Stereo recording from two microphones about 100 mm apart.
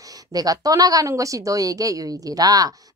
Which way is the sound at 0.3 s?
40° right (ahead or behind).